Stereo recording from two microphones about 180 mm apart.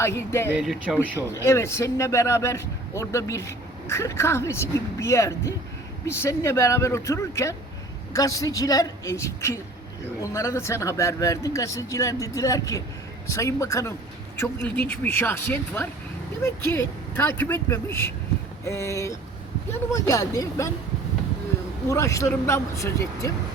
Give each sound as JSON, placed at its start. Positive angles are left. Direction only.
{"t": 0.0, "sound": "speech", "side_deg": 15}
{"t": 0.5, "sound": "speech", "side_deg": 0}
{"t": 0.9, "sound": "speech", "side_deg": 15}
{"t": 21.8, "sound": "speech", "side_deg": 15}